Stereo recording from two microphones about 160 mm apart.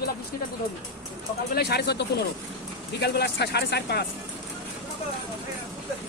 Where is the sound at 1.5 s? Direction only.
90° left.